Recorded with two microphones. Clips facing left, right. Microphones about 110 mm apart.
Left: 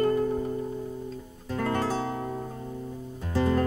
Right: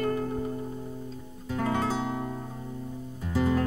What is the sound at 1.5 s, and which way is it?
Music, 10° right (ahead or behind).